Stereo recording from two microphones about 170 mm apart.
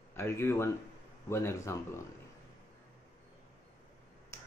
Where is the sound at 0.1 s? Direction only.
15° left (ahead or behind).